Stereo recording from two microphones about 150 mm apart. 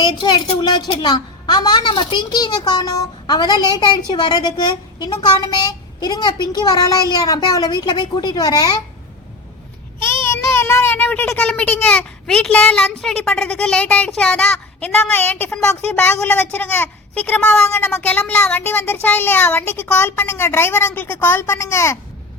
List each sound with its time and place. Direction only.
0.0 s a woman's voice: 30° left (ahead or behind)
10.1 s a child's voice: 20° left (ahead or behind)